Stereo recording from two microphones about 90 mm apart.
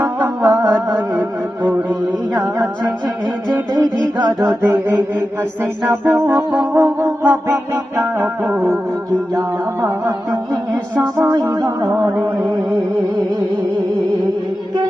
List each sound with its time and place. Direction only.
0.4 s music: 40° right (ahead or behind)
2.3 s music: 25° right (ahead or behind)
4.2 s music: 40° right (ahead or behind)
4.6 s mantra: 25° right (ahead or behind)
6.1 s music: 20° right (ahead or behind)
11.9 s music: 30° right (ahead or behind)